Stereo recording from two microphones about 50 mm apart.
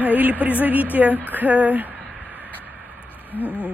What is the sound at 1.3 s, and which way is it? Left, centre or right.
Speech, right.